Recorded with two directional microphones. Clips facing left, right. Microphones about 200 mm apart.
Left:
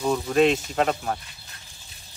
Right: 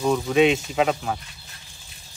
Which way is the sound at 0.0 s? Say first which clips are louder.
Right 2 dB; centre (ahead or behind).